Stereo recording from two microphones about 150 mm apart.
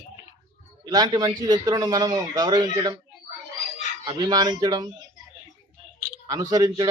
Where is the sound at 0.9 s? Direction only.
25° right (ahead or behind).